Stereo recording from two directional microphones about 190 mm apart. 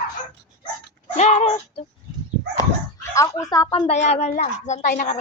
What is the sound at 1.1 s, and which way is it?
Speech, 35° left (ahead or behind).